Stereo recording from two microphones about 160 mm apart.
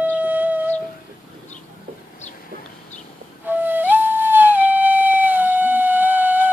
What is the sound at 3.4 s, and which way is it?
Flute, 10° right (ahead or behind).